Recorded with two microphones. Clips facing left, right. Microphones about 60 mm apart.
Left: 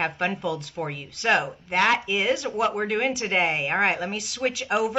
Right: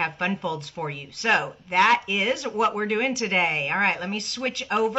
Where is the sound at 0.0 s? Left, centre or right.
Centre.